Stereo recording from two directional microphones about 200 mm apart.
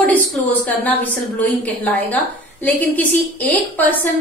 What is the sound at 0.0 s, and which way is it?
A woman's voice, 10° left (ahead or behind).